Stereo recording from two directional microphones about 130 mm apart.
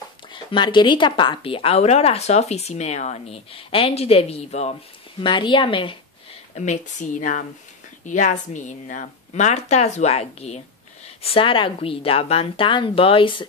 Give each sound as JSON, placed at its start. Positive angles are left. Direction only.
{"t": 0.3, "sound": "a woman's voice", "side_deg": 40}
{"t": 5.2, "sound": "a woman's voice", "side_deg": 40}
{"t": 6.5, "sound": "speech", "side_deg": 70}
{"t": 8.0, "sound": "a woman's voice", "side_deg": 75}
{"t": 11.2, "sound": "a woman's voice", "side_deg": 45}